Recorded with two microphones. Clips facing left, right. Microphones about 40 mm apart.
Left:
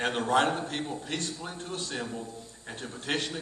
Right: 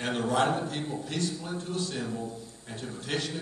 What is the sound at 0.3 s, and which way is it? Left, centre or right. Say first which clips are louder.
A man's voice: left 1 dB; left.